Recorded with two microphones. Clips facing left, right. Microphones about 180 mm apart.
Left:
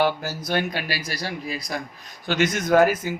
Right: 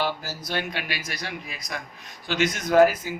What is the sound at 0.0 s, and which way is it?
Speech, 55° left (ahead or behind).